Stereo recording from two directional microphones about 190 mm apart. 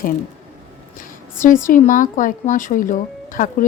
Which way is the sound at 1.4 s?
45° left (ahead or behind).